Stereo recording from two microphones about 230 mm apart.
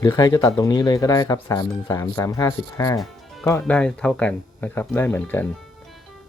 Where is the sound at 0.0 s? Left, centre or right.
Centre.